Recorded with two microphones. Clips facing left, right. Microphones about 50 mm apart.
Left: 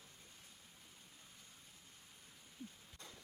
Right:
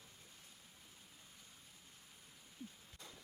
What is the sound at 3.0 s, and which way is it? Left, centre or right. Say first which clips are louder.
Waves: even; centre.